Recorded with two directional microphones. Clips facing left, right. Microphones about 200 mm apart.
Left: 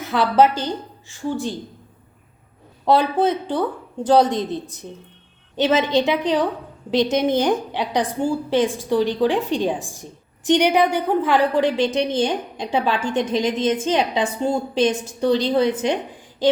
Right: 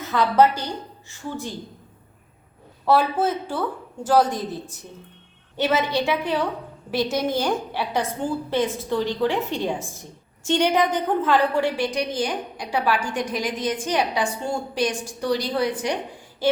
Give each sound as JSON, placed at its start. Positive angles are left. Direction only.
{"t": 0.0, "sound": "a woman's voice", "side_deg": 15}
{"t": 2.8, "sound": "a woman's voice", "side_deg": 20}